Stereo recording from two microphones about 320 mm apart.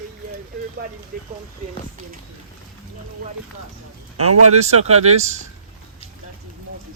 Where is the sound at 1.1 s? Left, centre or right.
Right.